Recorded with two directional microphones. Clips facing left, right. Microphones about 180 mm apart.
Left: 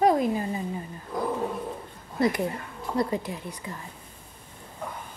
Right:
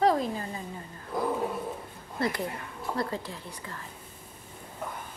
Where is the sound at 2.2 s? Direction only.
15° left (ahead or behind).